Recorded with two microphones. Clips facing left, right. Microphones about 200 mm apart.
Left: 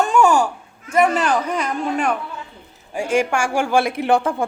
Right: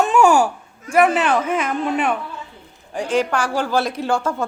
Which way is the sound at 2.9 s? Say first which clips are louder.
Left 1 dB; 10° left (ahead or behind).